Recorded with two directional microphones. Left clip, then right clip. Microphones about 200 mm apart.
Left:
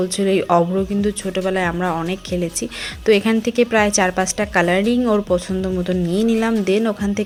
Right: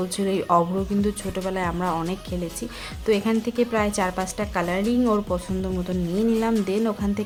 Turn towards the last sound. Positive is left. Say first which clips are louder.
# left 6 dB
turn(degrees=10)  # may be behind; listen again after turning